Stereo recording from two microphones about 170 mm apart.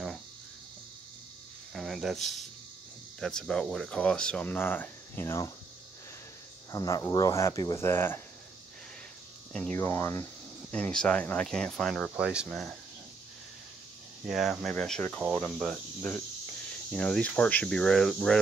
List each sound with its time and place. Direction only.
1.7 s a sound: centre (ahead or behind)
3.2 s speech: 5° left (ahead or behind)
6.7 s speech: 20° left (ahead or behind)
9.5 s speech: 5° left (ahead or behind)
14.2 s speech: centre (ahead or behind)